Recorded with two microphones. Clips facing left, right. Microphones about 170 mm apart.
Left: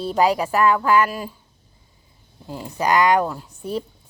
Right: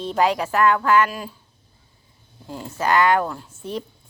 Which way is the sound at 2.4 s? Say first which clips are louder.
Left 1 dB; 10° left (ahead or behind).